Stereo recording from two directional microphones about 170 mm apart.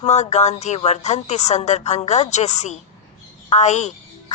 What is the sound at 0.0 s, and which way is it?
A woman's voice, 40° left (ahead or behind).